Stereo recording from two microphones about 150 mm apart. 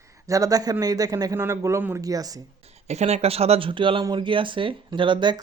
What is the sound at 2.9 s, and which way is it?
Speech, 45° right (ahead or behind).